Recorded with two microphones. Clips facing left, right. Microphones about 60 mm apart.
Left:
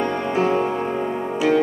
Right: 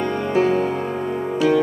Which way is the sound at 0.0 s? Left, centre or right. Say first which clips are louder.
Right 1 dB; left.